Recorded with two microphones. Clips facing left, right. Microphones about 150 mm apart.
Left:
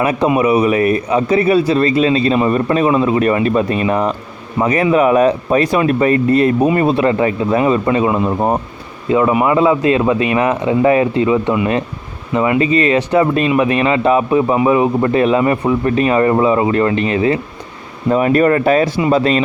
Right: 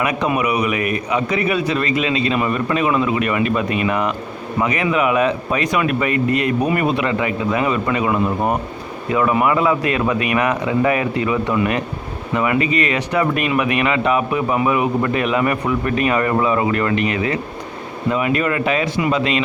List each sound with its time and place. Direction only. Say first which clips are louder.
0.0 s a man's voice: left 5 dB; 30° left (ahead or behind)